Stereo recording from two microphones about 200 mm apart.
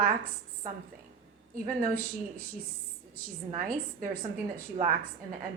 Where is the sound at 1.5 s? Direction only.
45° right (ahead or behind).